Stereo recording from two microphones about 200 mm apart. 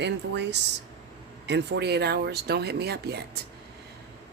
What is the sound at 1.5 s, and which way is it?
Speech, 60° right (ahead or behind).